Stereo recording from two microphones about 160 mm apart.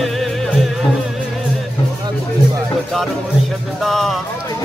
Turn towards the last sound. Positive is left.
turn(degrees=0)  # may be behind; listen again after turning